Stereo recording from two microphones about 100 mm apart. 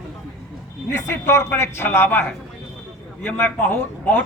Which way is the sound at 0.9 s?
25° left (ahead or behind).